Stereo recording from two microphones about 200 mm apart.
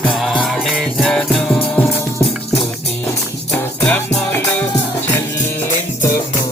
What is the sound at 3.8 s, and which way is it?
Music, 10° left (ahead or behind).